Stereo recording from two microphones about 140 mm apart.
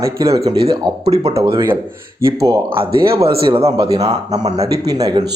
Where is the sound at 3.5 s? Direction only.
40° right (ahead or behind).